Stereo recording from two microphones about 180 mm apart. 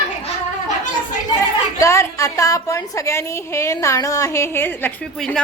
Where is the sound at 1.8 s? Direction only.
15° left (ahead or behind).